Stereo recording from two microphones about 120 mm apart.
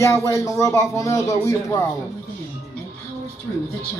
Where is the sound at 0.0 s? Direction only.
25° left (ahead or behind).